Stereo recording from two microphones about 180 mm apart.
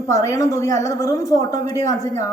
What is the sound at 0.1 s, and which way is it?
A woman's voice, 15° left (ahead or behind).